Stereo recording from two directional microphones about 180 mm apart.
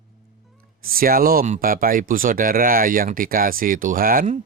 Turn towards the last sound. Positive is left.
turn(degrees=-45)  # may be behind; listen again after turning